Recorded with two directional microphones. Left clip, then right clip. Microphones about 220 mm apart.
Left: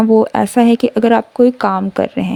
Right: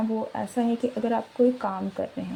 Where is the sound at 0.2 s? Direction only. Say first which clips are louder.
Left 16 dB; 50° left (ahead or behind).